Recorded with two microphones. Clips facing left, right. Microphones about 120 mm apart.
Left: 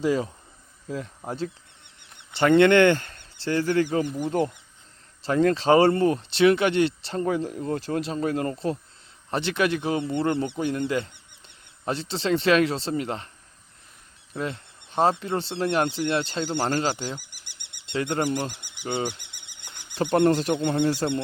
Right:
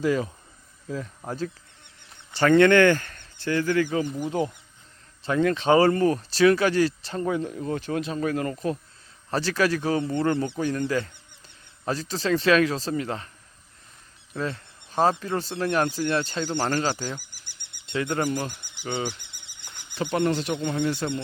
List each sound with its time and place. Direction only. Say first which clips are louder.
0.0 s speech: even; 25° left (ahead or behind)
2.1 s speech: even; 20° left (ahead or behind)
4.1 s speech: left 2 dB; 10° right (ahead or behind)
5.2 s speech: left 2 dB; 35° left (ahead or behind)
14.3 s insect: even; 20° left (ahead or behind)
15.2 s speech: left 1 dB; 25° left (ahead or behind)
17.2 s a sound: even; 65° left (ahead or behind)
17.8 s speech: even; 25° left (ahead or behind)
20.0 s speech: left 4 dB; 40° left (ahead or behind)